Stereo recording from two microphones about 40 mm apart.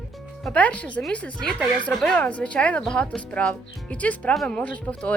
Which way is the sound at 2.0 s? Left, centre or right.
Left.